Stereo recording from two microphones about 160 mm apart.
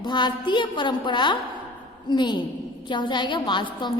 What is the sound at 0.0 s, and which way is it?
A woman's voice, 30° left (ahead or behind).